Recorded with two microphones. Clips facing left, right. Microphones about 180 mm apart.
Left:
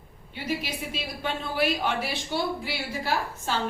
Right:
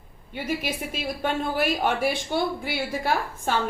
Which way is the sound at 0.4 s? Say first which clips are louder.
Right 2 dB; 50° right (ahead or behind).